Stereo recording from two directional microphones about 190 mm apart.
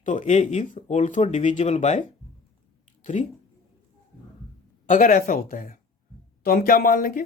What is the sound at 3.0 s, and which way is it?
Speech, 40° left (ahead or behind).